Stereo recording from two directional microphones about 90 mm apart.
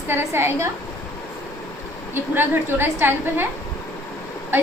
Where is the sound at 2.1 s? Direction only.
25° right (ahead or behind).